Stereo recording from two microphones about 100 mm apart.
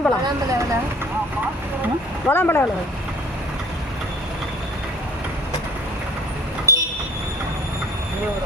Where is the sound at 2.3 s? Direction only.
20° left (ahead or behind).